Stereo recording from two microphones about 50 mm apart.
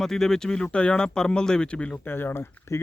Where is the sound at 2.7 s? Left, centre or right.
Left.